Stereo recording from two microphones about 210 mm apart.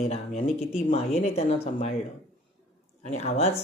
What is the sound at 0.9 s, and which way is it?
Speech, 30° left (ahead or behind).